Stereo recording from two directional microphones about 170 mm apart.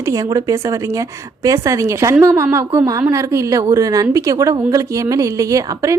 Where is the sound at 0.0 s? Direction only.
20° right (ahead or behind).